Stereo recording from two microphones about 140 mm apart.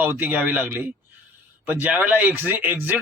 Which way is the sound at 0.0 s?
15° right (ahead or behind).